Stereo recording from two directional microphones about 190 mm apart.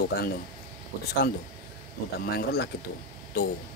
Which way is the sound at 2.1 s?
55° left (ahead or behind).